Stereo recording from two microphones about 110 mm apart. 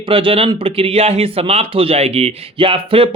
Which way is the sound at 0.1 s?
55° right (ahead or behind).